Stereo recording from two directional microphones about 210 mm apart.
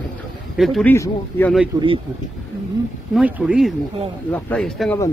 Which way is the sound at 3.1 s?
5° right (ahead or behind).